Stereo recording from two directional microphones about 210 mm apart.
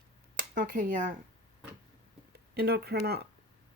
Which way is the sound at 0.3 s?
40° right (ahead or behind).